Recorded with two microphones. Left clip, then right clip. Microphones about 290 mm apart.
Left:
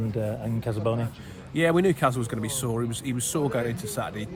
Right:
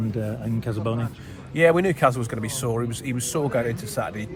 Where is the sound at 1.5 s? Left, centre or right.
Centre.